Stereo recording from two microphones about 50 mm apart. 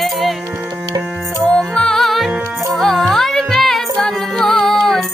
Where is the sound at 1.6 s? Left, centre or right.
Centre.